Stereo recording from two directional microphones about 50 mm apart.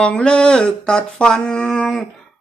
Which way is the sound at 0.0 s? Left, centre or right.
Centre.